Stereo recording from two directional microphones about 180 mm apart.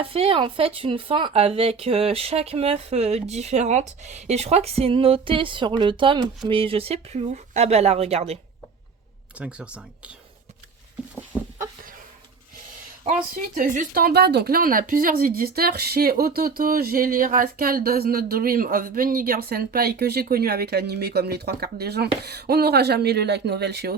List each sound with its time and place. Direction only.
0.0 s speech: 30° right (ahead or behind)
9.4 s speech: 5° right (ahead or behind)
13.3 s speech: 50° right (ahead or behind)